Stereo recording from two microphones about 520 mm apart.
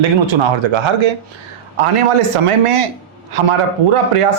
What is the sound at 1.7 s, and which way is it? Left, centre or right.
A man's voice, right.